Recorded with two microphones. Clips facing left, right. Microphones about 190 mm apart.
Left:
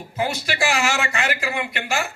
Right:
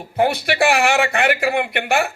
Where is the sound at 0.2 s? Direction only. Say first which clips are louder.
Right 7 dB; 60° right (ahead or behind).